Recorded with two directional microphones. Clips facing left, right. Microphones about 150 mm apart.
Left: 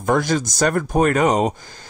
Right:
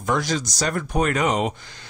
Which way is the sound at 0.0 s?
50° left (ahead or behind).